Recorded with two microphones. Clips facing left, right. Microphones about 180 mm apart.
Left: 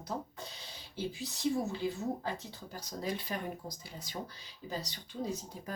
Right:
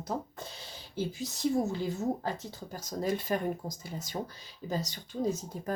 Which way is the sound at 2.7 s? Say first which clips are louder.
Right 6 dB; 45° right (ahead or behind).